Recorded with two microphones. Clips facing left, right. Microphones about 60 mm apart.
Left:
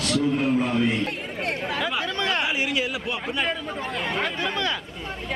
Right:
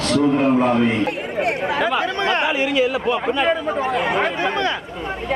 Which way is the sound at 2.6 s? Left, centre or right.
Centre.